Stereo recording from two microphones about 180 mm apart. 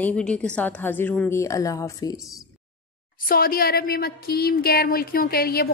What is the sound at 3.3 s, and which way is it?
Speech, 55° left (ahead or behind).